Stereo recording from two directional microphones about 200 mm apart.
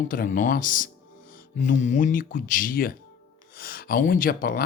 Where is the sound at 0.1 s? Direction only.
45° left (ahead or behind).